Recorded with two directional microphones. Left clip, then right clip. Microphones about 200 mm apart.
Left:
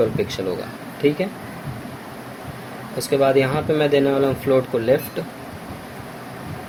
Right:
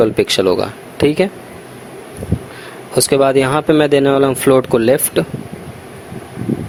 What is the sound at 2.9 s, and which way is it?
Speech, 55° right (ahead or behind).